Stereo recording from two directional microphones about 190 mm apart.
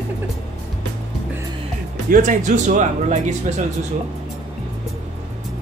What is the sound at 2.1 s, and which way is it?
Speech, 45° right (ahead or behind).